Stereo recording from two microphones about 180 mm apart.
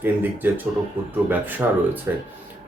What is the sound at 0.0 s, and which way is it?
Speech, 10° right (ahead or behind).